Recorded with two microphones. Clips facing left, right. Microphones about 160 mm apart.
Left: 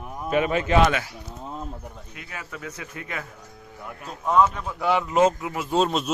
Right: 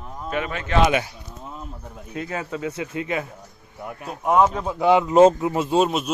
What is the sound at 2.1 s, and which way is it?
A man's voice, 35° right (ahead or behind).